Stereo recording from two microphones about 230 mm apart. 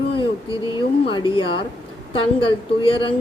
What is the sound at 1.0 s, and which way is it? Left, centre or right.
A woman's voice, left.